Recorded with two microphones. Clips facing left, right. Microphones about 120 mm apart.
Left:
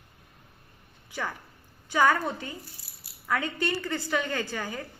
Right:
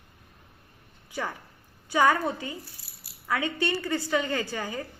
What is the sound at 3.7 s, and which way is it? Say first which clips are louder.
A woman's voice: right 2 dB; 5° right (ahead or behind).